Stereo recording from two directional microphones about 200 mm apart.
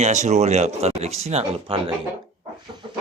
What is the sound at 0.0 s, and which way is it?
Speech, 35° right (ahead or behind).